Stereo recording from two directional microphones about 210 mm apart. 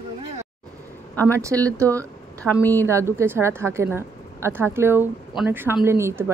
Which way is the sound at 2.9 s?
15° right (ahead or behind).